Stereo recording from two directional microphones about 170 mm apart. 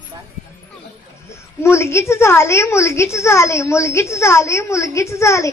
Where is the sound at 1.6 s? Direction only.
15° left (ahead or behind).